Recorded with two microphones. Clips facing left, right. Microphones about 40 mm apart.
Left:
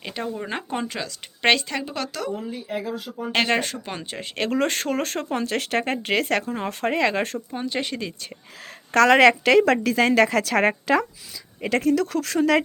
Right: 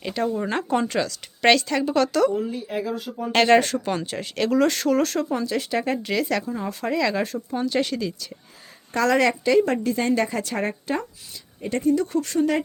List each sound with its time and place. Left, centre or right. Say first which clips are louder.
0.0 s speech: right 5 dB; centre
1.0 s speech: right 2 dB; centre
4.4 s speech: right 3 dB; left
7.5 s speech: right 7 dB; centre
8.9 s a woman's voice: left 5 dB; left